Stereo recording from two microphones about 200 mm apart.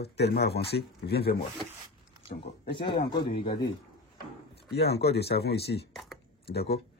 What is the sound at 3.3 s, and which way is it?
Speech, 55° left (ahead or behind).